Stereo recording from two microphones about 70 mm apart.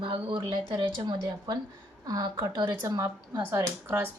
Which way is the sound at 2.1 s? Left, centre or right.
Right.